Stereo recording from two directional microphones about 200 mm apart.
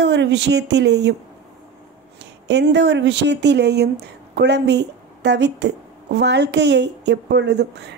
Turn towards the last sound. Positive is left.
turn(degrees=-55)  # may be behind; listen again after turning